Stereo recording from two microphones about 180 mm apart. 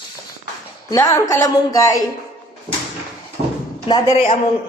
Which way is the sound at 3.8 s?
25° left (ahead or behind).